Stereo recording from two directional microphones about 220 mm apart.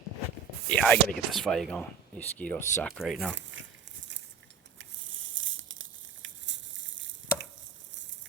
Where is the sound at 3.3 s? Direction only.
55° right (ahead or behind).